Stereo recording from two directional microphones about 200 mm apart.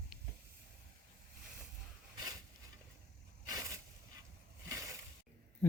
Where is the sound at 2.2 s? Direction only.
20° right (ahead or behind).